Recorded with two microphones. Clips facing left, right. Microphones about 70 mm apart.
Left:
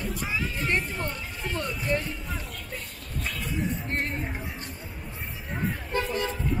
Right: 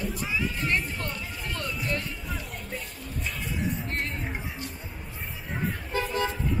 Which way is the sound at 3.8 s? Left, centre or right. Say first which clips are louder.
Left 2 dB; left.